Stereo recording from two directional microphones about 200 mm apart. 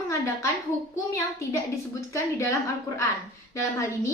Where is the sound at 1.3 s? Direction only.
15° left (ahead or behind).